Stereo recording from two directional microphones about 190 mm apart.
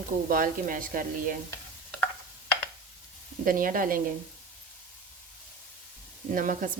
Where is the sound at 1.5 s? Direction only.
10° left (ahead or behind).